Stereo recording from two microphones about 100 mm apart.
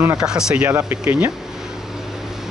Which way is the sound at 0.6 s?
20° right (ahead or behind).